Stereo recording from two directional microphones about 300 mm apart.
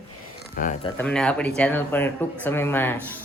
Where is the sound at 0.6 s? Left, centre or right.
Left.